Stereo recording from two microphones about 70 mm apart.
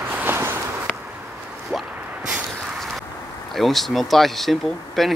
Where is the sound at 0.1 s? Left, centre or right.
Right.